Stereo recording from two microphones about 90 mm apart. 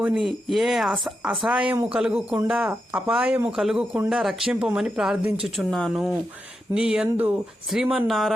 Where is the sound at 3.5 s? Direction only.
5° right (ahead or behind).